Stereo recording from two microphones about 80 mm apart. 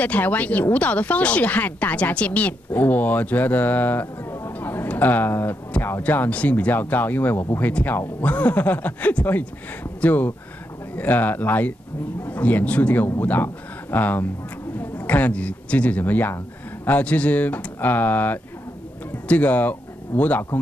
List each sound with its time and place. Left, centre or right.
0.0 s speech: centre
4.3 s a sound: left
4.6 s a man's voice: left